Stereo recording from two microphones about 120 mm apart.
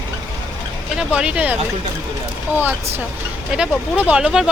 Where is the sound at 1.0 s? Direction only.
10° right (ahead or behind).